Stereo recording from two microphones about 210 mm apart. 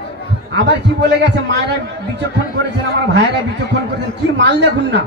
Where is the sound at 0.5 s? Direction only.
55° right (ahead or behind).